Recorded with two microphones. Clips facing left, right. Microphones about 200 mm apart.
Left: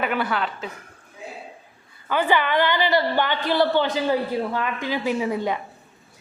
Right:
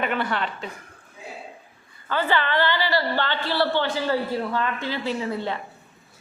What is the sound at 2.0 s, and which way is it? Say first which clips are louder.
A woman's voice: left 2 dB; 15° left (ahead or behind).